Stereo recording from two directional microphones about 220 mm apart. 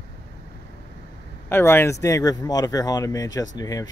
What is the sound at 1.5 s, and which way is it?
Speech, 10° left (ahead or behind).